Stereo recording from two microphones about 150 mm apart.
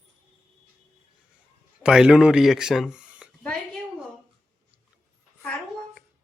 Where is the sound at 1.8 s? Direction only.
5° right (ahead or behind).